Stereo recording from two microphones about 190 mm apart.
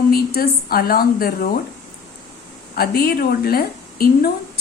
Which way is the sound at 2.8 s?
55° left (ahead or behind).